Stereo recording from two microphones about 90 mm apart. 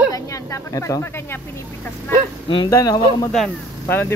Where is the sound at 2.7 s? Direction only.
40° left (ahead or behind).